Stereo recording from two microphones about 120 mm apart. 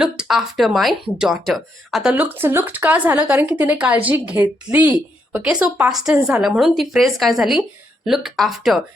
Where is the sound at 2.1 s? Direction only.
15° right (ahead or behind).